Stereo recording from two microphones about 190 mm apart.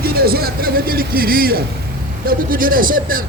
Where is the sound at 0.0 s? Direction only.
55° right (ahead or behind).